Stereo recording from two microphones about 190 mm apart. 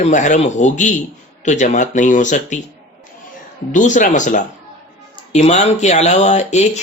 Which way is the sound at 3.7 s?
40° left (ahead or behind).